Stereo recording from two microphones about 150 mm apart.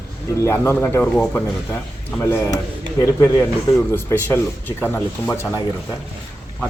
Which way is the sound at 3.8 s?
15° left (ahead or behind).